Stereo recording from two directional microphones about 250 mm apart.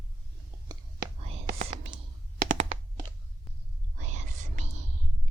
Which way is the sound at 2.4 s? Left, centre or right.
Right.